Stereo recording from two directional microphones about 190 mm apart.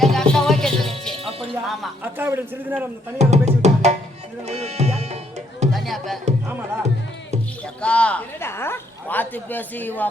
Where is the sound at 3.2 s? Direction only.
35° right (ahead or behind).